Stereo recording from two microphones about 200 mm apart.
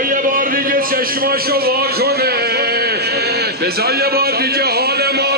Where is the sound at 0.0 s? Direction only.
45° right (ahead or behind).